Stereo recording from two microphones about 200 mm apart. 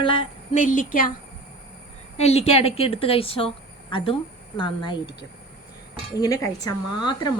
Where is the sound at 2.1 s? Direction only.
30° left (ahead or behind).